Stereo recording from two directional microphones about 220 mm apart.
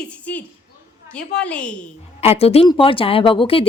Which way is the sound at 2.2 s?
25° left (ahead or behind).